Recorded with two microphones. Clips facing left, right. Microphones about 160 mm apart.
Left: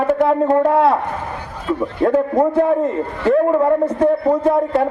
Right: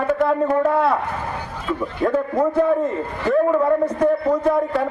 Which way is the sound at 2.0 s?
25° left (ahead or behind).